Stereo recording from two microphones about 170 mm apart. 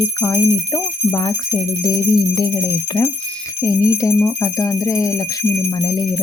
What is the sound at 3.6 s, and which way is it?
Speech, 20° left (ahead or behind).